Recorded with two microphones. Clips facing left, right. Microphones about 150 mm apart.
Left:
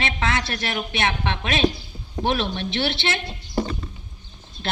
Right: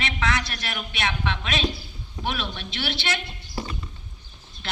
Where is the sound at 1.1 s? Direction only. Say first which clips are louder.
Left 3 dB; 55° left (ahead or behind).